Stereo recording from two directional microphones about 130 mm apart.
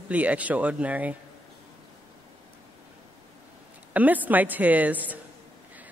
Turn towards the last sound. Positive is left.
turn(degrees=-10)  # may be behind; listen again after turning